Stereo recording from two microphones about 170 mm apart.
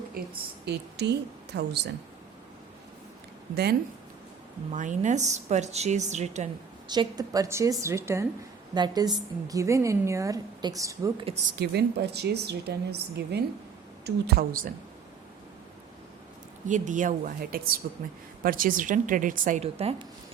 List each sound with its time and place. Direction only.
0.2 s a woman's voice: 60° right (ahead or behind)
0.6 s a woman's voice: 80° right
3.5 s a woman's voice: 70° right (ahead or behind)
4.7 s a woman's voice: 45° right (ahead or behind)
6.8 s a woman's voice: 25° right (ahead or behind)
11.5 s a woman's voice: 75° right (ahead or behind); by 14.7 s 60° right (ahead or behind)
16.6 s a woman's voice: 45° right (ahead or behind)
19.6 s a woman's voice: 35° right (ahead or behind)